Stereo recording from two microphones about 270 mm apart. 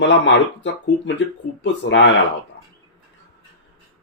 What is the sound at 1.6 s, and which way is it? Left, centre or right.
Speech, left.